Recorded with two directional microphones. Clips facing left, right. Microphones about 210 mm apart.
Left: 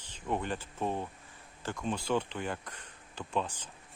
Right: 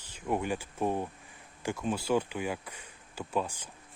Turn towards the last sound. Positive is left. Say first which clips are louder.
# right 2 dB
turn(degrees=-10)  # may be behind; listen again after turning